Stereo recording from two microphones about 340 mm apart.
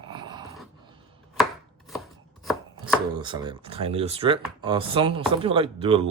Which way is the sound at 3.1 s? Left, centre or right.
Centre.